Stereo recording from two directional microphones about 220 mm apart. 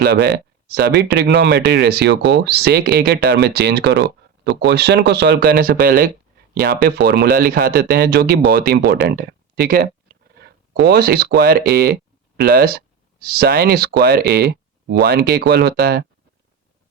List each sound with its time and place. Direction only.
0.0 s speech: 45° right (ahead or behind)